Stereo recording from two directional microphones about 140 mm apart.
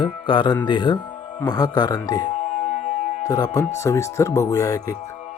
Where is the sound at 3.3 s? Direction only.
30° left (ahead or behind).